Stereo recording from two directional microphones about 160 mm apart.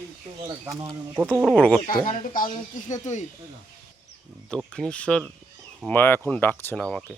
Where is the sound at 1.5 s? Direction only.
10° left (ahead or behind).